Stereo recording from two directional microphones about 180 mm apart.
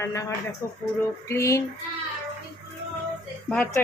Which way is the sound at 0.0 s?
15° left (ahead or behind).